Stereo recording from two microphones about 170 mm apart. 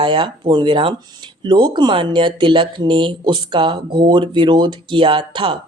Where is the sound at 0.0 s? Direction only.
30° right (ahead or behind).